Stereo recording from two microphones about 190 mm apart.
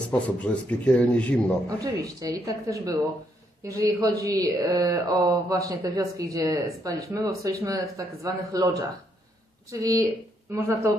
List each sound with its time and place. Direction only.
0.1 s a man's voice: 10° left (ahead or behind)
1.8 s speech: 20° right (ahead or behind)
9.8 s speech: 15° right (ahead or behind)